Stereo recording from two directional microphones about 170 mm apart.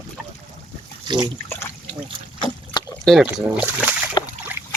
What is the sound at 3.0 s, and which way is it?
Speech, centre (ahead or behind).